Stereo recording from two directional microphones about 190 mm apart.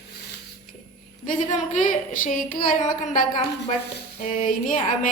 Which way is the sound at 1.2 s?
40° left (ahead or behind).